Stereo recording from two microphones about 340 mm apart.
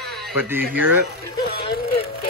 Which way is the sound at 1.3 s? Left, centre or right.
Left.